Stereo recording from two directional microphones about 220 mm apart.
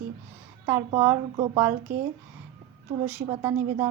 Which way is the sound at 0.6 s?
10° right (ahead or behind).